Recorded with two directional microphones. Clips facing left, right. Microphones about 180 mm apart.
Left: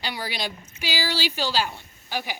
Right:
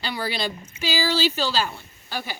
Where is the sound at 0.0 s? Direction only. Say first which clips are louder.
Right 3 dB; 10° left (ahead or behind).